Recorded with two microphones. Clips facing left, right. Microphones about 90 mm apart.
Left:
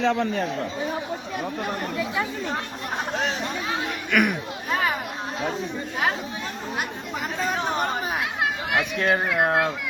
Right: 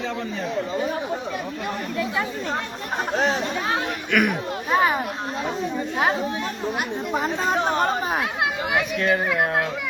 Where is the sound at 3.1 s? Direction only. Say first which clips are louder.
Right 7 dB; 35° right (ahead or behind).